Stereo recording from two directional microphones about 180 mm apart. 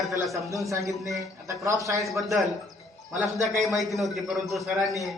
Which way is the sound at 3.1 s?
15° right (ahead or behind).